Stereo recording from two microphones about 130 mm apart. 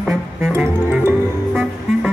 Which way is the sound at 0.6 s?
20° right (ahead or behind).